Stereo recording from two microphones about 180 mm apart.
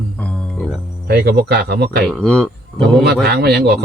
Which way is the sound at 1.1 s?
60° right (ahead or behind).